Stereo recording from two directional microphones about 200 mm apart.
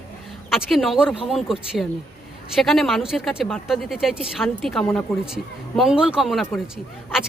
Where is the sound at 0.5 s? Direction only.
Centre (ahead or behind).